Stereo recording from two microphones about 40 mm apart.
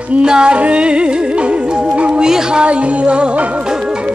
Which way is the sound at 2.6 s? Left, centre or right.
Right.